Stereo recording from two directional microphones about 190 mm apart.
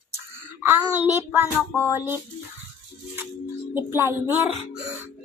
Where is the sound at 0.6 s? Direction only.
15° right (ahead or behind).